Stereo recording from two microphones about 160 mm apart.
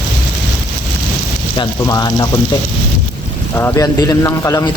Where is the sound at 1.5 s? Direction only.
25° left (ahead or behind).